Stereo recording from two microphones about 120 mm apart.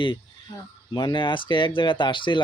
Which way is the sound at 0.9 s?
40° left (ahead or behind).